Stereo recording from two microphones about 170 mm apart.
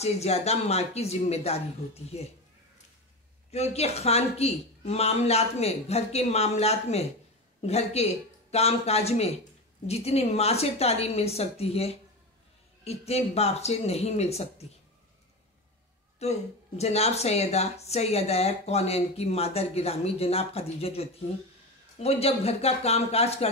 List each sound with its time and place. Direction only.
0.0 s speech: 40° left (ahead or behind)
3.5 s speech: 40° left (ahead or behind)
16.2 s speech: 40° left (ahead or behind)